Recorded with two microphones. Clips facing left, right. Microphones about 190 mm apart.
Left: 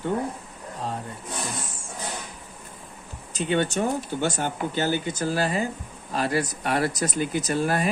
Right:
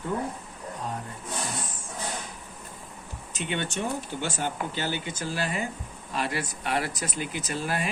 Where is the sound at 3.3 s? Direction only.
35° left (ahead or behind).